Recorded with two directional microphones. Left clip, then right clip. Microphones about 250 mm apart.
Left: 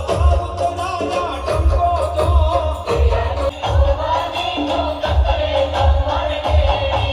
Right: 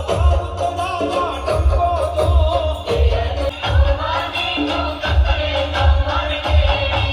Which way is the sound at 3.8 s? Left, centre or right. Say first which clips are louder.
Left 3 dB; left.